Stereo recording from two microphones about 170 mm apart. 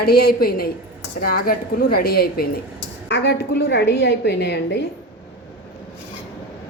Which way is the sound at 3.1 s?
80° left.